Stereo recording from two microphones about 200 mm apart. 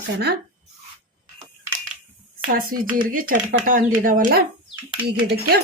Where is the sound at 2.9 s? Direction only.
45° right (ahead or behind).